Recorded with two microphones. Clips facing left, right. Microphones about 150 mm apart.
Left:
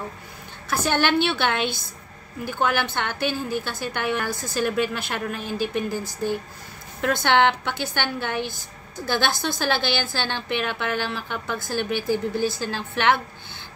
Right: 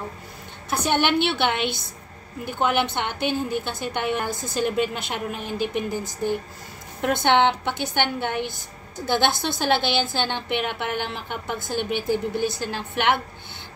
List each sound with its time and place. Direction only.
0.7 s a woman's voice: 20° right (ahead or behind)